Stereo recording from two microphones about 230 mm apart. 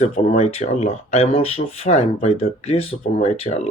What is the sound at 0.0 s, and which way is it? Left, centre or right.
Speech, left.